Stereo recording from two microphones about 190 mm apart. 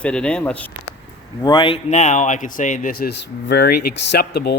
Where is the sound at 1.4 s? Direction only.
25° left (ahead or behind); by 4.5 s 55° left (ahead or behind).